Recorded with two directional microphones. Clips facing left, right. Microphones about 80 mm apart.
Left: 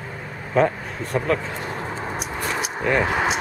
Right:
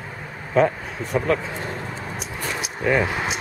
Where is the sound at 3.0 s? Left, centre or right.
Left.